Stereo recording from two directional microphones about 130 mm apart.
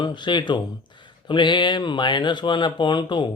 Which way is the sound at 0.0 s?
35° left (ahead or behind).